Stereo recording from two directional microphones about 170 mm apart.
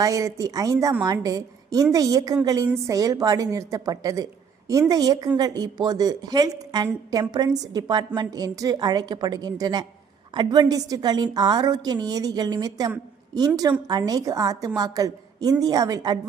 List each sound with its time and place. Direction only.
0.0 s a woman's voice: 20° right (ahead or behind)